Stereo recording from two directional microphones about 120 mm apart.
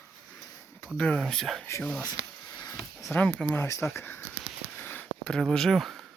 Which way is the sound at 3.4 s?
10° left (ahead or behind).